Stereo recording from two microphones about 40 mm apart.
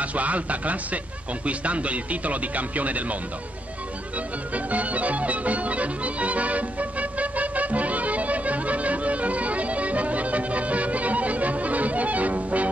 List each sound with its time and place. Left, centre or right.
0.0 s speech: right
4.6 s music: right